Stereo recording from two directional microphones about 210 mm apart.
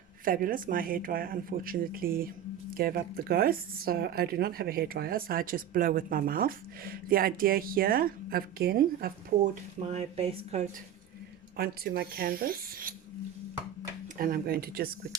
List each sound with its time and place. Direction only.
0.3 s speech: 40° right (ahead or behind)
9.8 s speech: 30° right (ahead or behind)
11.5 s speech: 45° right (ahead or behind)
14.2 s speech: 45° right (ahead or behind)